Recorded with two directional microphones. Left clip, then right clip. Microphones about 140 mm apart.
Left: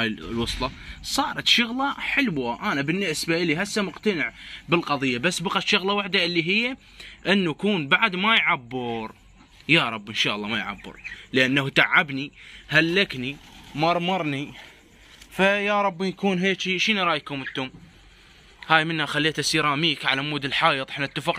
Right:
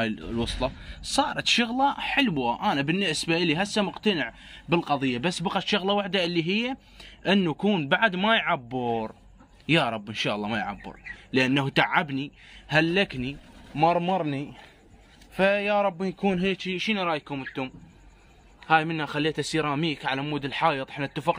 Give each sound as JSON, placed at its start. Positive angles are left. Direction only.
{"t": 0.0, "sound": "a man's voice", "side_deg": -10}
{"t": 15.3, "sound": "speech", "side_deg": 0}
{"t": 18.7, "sound": "speech", "side_deg": 5}